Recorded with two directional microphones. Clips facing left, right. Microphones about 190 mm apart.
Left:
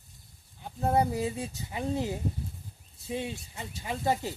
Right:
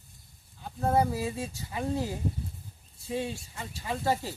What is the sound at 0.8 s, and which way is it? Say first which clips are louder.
Speech: even; 20° left (ahead or behind).